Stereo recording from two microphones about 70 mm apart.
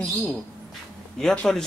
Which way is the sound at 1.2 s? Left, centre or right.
Centre.